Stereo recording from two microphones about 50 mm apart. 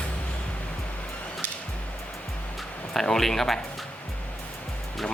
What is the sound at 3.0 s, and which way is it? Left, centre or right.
Speech, centre.